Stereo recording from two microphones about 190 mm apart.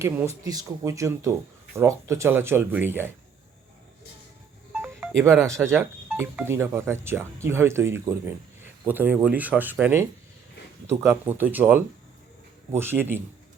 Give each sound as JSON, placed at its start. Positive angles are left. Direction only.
{"t": 0.0, "sound": "speech", "side_deg": -15}
{"t": 5.2, "sound": "speech", "side_deg": -15}